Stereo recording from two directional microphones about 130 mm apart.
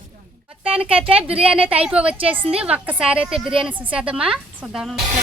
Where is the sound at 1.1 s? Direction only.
50° right (ahead or behind).